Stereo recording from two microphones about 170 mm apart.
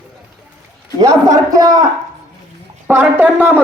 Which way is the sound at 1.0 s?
20° right (ahead or behind).